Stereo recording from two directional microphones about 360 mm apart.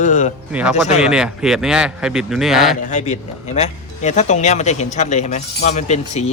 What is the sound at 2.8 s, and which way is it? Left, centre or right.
Speech, centre.